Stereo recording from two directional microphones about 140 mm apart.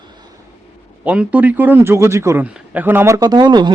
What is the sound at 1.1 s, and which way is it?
Speech, 10° right (ahead or behind).